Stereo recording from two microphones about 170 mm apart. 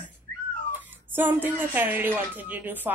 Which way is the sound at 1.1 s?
10° right (ahead or behind).